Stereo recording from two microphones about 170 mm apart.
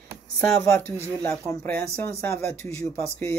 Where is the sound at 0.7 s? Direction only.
5° left (ahead or behind).